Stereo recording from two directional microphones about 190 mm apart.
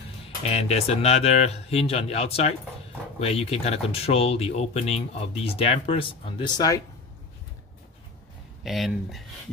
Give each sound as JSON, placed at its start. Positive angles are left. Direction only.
{"t": 0.5, "sound": "speech", "side_deg": 35}
{"t": 8.6, "sound": "speech", "side_deg": 0}